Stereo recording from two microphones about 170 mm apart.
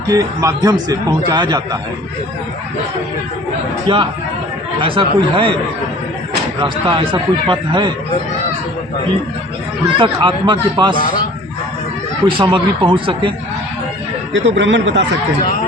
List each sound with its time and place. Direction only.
0.1 s speech: 20° right (ahead or behind)
3.8 s speech: 30° right (ahead or behind)
6.6 s speech: 30° right (ahead or behind)
10.2 s speech: 25° right (ahead or behind)
12.2 s speech: 30° right (ahead or behind)
14.3 s speech: 90° right